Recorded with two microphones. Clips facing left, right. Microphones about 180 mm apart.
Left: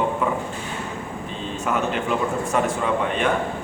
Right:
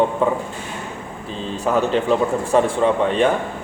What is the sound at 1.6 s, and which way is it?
A man's voice, 35° right (ahead or behind).